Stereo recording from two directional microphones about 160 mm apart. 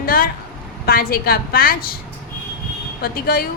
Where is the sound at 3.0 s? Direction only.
70° left (ahead or behind).